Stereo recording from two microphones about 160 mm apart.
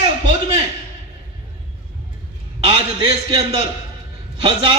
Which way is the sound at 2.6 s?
35° right (ahead or behind).